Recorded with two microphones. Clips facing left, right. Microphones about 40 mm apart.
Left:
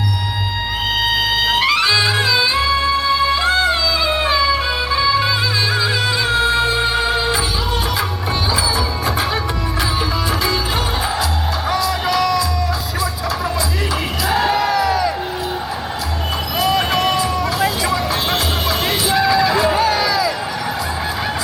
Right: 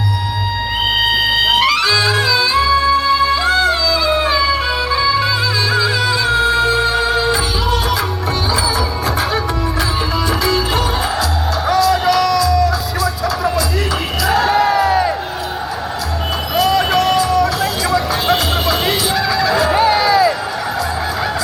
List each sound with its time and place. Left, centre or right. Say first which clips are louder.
1.5 s music: right 2 dB; centre
11.7 s music: right 6 dB; centre
14.3 s crowd: right 3 dB; centre
14.5 s crowd: right 3 dB; centre
16.6 s vehicle: right 3 dB; centre
19.0 s fowl: left 1 dB; centre
19.7 s a sound: right 4 dB; right